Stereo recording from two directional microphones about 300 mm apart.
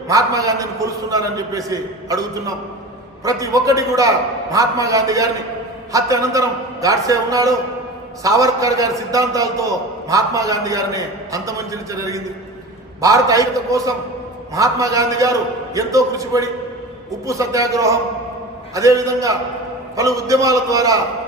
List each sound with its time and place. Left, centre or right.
0.1 s a man's voice: centre
3.2 s a man's voice: centre